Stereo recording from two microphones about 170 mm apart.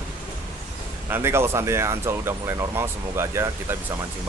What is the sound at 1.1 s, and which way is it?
Speech, 15° right (ahead or behind).